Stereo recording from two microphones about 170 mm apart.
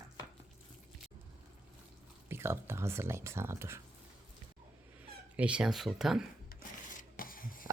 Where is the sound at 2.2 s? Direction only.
15° right (ahead or behind).